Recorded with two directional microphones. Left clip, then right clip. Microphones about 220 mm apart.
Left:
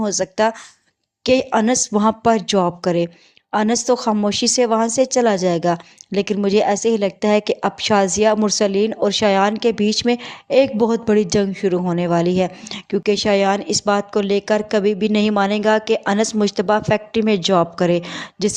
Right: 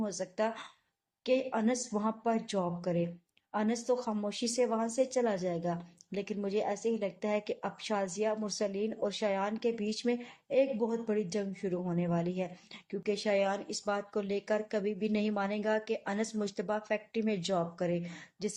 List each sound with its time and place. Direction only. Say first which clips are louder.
0.0 s a woman's voice: left 16 dB; 45° left (ahead or behind)